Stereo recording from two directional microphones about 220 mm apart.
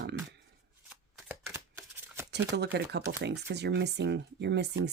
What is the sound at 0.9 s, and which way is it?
Shuffling cards, 10° right (ahead or behind).